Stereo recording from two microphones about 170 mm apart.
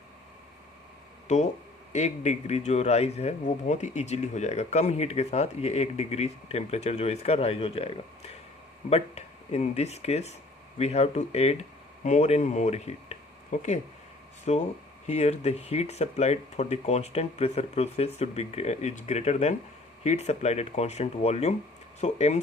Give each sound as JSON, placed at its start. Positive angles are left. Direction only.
{"t": 1.3, "sound": "speech", "side_deg": 45}